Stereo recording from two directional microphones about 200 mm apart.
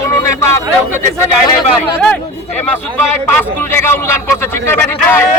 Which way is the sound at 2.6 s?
10° left (ahead or behind).